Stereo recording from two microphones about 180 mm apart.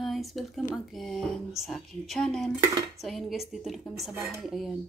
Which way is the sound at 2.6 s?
15° right (ahead or behind).